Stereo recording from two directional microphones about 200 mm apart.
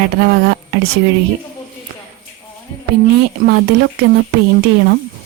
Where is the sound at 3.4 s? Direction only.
55° right (ahead or behind).